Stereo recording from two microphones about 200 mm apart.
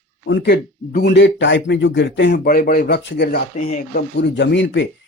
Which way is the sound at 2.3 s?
45° left (ahead or behind).